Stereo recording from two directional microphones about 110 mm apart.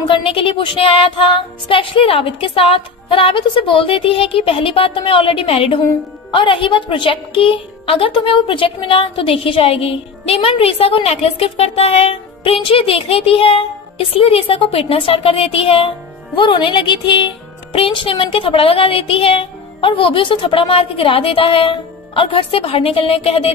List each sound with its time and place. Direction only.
0.1 s a woman's voice: 55° left (ahead or behind)
16.3 s a woman's voice: 50° left (ahead or behind); by 23.5 s 65° left (ahead or behind)